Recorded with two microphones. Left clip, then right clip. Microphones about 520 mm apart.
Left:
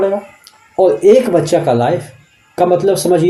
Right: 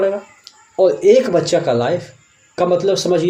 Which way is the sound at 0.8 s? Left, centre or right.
Left.